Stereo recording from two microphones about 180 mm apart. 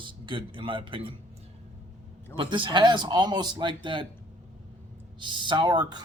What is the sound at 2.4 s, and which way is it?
Speech, 25° right (ahead or behind).